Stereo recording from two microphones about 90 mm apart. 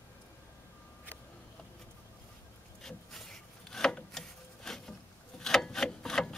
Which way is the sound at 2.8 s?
5° left (ahead or behind).